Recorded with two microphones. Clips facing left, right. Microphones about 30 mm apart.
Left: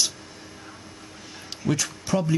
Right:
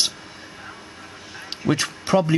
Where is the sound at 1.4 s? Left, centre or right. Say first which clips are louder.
Right 4 dB; right.